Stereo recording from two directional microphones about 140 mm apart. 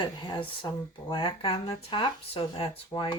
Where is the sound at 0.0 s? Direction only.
35° left (ahead or behind).